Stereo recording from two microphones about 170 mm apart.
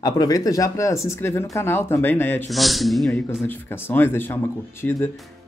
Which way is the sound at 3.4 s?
10° left (ahead or behind).